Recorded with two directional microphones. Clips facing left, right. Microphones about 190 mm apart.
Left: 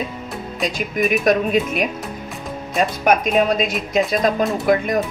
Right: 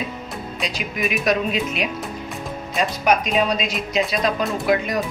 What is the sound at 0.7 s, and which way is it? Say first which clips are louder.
A woman's voice: left 6 dB; 50° left (ahead or behind).